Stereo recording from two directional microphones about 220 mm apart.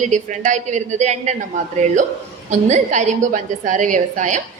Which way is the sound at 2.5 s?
35° right (ahead or behind).